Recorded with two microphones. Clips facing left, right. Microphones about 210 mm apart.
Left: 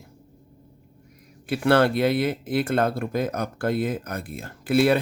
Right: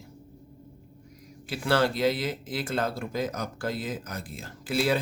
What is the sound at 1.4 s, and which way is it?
Speech, 60° left (ahead or behind).